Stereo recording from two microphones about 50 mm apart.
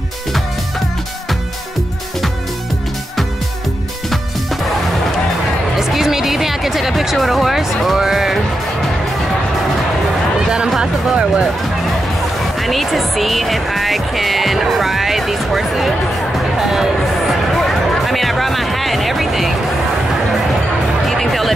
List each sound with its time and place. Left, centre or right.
5.8 s music: centre
10.8 s speech: centre
12.6 s speech: centre
21.1 s speech: centre